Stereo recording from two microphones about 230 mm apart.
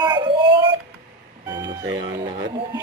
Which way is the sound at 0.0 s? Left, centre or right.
Right.